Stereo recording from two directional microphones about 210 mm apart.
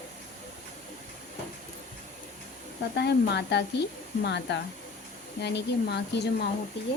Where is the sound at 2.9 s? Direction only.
55° left (ahead or behind).